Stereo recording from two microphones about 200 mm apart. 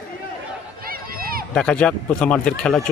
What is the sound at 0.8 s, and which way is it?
Run, 45° right (ahead or behind).